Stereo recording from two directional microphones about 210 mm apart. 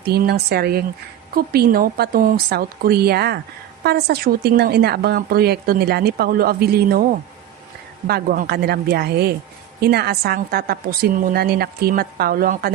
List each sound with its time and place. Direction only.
0.0 s a woman's voice: 50° right (ahead or behind)